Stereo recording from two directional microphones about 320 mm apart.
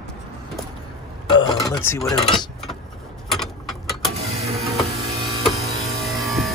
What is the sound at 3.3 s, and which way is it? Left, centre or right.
Vehicle, centre.